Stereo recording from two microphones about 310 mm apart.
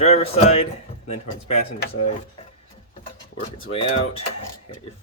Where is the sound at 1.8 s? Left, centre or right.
Left.